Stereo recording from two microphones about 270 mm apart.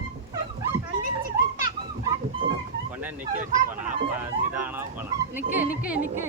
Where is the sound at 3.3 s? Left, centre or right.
Right.